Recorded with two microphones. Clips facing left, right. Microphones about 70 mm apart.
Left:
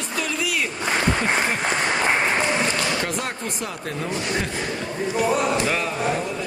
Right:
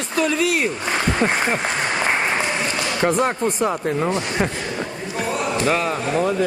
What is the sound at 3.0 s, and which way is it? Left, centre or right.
Speech, right.